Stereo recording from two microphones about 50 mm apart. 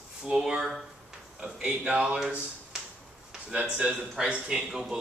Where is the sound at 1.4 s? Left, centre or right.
Right.